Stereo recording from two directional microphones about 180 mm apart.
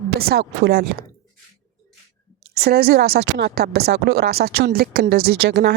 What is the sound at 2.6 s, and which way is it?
Speech, 60° right (ahead or behind).